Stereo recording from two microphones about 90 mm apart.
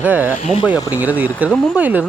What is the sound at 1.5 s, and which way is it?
Speech, 10° left (ahead or behind).